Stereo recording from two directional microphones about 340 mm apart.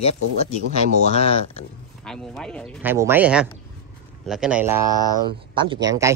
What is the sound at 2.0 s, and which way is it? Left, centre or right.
Speech, centre.